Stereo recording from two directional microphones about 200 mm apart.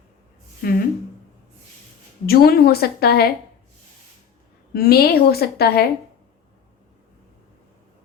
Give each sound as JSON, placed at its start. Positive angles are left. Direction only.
{"t": 0.6, "sound": "a woman's voice", "side_deg": 50}
{"t": 2.2, "sound": "a woman's voice", "side_deg": 50}
{"t": 4.7, "sound": "a woman's voice", "side_deg": 50}